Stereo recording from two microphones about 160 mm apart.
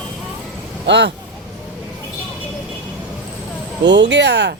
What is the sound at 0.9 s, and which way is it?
Speech, 90° right.